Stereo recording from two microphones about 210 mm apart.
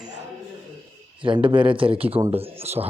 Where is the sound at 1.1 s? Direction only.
25° right (ahead or behind).